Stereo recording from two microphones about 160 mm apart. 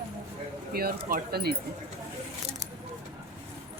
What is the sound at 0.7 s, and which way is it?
Speech, 70° right (ahead or behind).